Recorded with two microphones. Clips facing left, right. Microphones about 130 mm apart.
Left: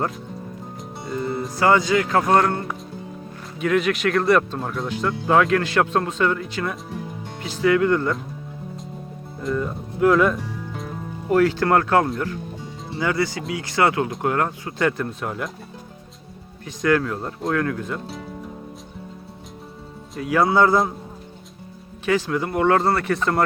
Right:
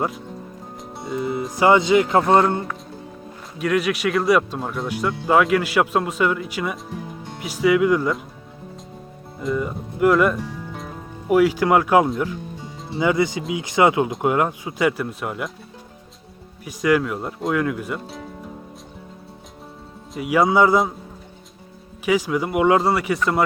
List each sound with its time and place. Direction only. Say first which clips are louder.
1.0 s speech: right 1 dB; 5° right (ahead or behind)
1.5 s speech: right 3 dB; 20° right (ahead or behind)
3.6 s speech: even; 5° right (ahead or behind)
9.4 s music: right 1 dB; 5° right (ahead or behind)
11.3 s speech: right 1 dB; 10° right (ahead or behind)
16.6 s speech: right 1 dB; 10° right (ahead or behind)
20.1 s speech: right 1 dB; 10° right (ahead or behind)
22.0 s speech: right 1 dB; 10° right (ahead or behind)